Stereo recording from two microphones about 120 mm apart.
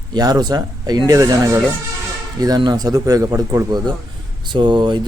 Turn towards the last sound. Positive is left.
turn(degrees=-40)  # may be behind; listen again after turning